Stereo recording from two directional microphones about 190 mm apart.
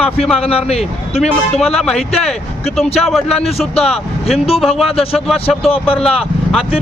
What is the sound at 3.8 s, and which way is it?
Speech, 30° left (ahead or behind).